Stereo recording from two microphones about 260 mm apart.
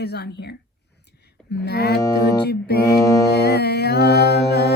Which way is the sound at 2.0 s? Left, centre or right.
Centre.